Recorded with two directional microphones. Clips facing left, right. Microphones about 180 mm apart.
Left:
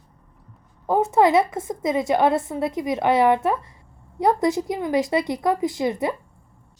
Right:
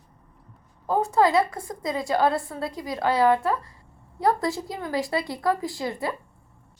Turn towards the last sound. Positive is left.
turn(degrees=20)  # may be behind; listen again after turning